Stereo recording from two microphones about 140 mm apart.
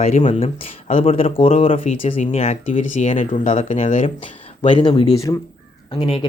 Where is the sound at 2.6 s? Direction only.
65° left (ahead or behind).